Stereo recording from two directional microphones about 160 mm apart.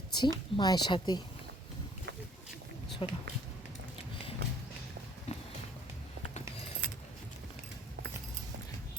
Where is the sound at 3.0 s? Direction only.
35° left (ahead or behind).